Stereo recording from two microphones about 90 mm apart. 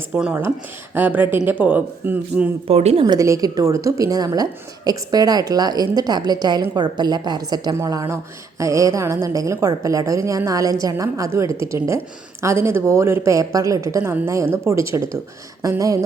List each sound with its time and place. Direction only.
0.1 s a woman's voice: 15° right (ahead or behind)
2.6 s speech: 90° right
3.2 s a woman's voice: 35° right (ahead or behind); by 7.8 s 55° right (ahead or behind)
7.9 s a woman's voice: 35° right (ahead or behind)